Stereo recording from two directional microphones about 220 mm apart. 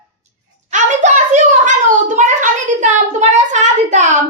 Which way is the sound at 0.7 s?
35° right (ahead or behind).